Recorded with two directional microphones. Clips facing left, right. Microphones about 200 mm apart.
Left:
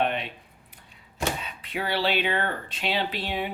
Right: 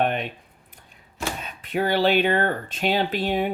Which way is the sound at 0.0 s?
45° right (ahead or behind).